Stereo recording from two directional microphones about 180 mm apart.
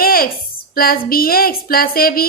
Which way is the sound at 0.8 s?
55° left (ahead or behind).